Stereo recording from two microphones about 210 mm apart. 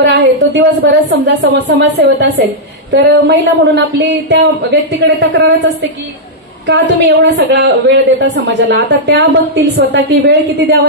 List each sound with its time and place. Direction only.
0.0 s a woman's voice: 55° right (ahead or behind)
6.7 s a woman's voice: 55° right (ahead or behind)